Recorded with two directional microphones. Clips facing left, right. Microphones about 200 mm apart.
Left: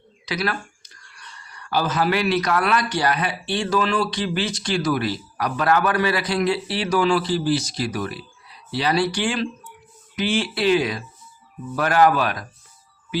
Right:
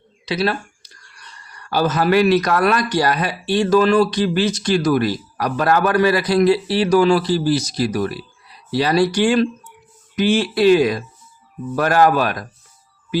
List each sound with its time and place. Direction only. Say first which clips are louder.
0.3 s speech: right 5 dB; 25° right (ahead or behind)
1.5 s a man's voice: right 4 dB; 40° right (ahead or behind)